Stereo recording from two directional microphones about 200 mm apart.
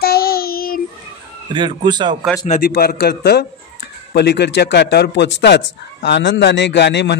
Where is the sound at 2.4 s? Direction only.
40° left (ahead or behind).